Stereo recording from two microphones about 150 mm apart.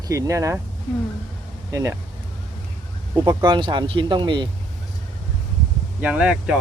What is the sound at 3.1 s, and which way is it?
Speech, 30° right (ahead or behind).